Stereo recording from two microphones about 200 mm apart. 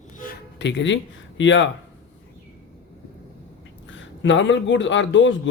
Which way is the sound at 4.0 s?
65° left (ahead or behind).